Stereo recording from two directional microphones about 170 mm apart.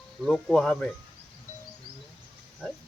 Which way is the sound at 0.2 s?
5° left (ahead or behind).